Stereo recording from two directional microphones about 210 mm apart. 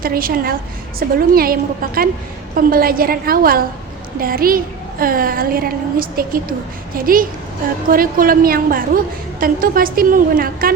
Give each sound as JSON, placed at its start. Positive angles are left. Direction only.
{"t": 0.0, "sound": "a woman's voice", "side_deg": -45}